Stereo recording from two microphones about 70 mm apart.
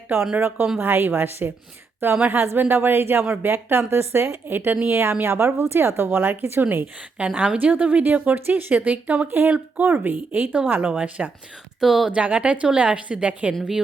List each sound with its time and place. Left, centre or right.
0.8 s a woman's voice: right
7.3 s a woman's voice: centre
11.8 s speech: centre
12.1 s a woman's voice: centre
13.5 s speech: centre